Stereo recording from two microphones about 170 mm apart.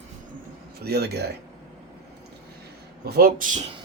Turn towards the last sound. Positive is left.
turn(degrees=-50)  # may be behind; listen again after turning